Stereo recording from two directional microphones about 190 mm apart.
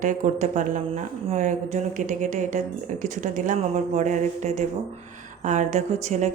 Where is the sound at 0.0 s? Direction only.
40° right (ahead or behind).